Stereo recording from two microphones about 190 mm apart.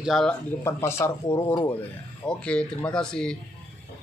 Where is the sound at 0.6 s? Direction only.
15° left (ahead or behind).